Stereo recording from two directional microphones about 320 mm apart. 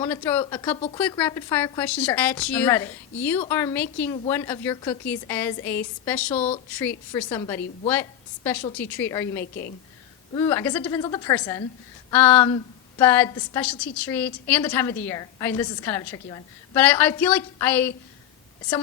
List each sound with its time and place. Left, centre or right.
0.0 s a woman's voice: centre
8.7 s a woman's voice: centre
9.4 s a woman's voice: left
10.3 s a woman's voice: centre